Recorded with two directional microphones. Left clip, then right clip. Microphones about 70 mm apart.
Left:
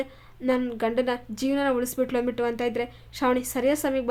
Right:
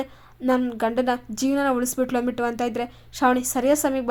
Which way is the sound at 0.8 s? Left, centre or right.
Right.